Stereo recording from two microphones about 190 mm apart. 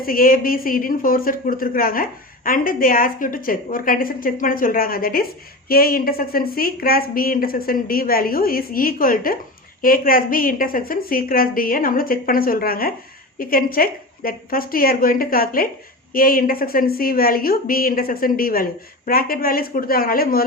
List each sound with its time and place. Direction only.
0.0 s a woman's voice: 50° left (ahead or behind)